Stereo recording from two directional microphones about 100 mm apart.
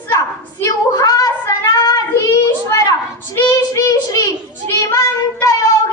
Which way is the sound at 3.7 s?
35° left (ahead or behind).